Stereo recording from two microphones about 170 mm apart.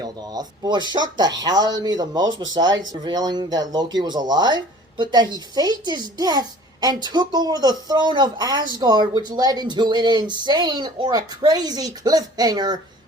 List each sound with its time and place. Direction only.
0.0 s speech: 25° right (ahead or behind)